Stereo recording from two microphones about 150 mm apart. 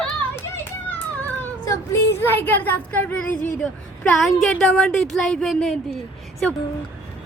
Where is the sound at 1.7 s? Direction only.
20° left (ahead or behind).